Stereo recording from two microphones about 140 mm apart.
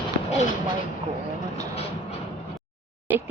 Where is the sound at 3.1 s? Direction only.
10° right (ahead or behind).